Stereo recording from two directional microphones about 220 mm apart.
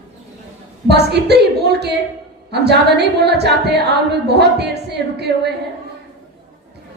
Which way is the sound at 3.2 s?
50° right (ahead or behind).